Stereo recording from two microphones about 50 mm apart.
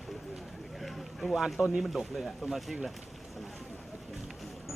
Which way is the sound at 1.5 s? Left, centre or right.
Centre.